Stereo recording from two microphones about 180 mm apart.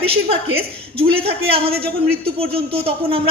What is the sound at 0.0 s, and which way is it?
Speech, 30° right (ahead or behind).